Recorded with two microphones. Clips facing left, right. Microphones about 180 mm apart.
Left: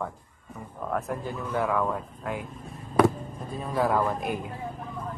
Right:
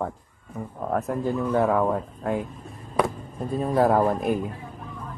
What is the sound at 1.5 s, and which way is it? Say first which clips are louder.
Speech: right 4 dB; 35° right (ahead or behind).